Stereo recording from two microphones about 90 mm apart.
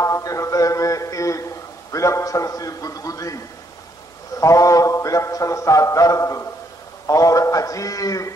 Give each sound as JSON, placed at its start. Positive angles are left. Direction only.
{"t": 0.0, "sound": "a man's voice", "side_deg": 35}
{"t": 4.4, "sound": "a man's voice", "side_deg": 35}